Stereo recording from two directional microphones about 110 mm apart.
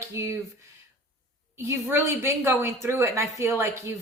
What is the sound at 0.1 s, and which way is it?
Speech, 25° right (ahead or behind).